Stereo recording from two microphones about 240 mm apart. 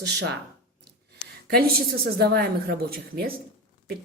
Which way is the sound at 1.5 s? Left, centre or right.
Right.